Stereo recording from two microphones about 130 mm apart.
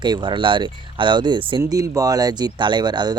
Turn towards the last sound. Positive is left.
turn(degrees=-35)  # may be behind; listen again after turning